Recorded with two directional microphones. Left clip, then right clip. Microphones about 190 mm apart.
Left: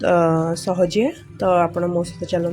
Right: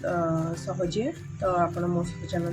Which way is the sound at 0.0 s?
40° left (ahead or behind).